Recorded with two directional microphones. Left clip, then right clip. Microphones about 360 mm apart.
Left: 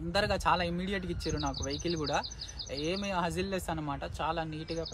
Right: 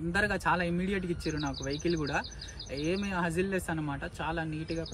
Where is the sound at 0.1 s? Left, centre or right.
Centre.